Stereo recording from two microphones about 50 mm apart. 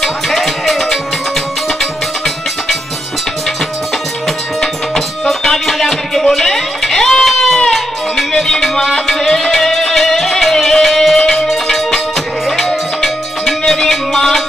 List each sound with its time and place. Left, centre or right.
0.0 s music: centre
4.6 s music: centre
12.4 s music: centre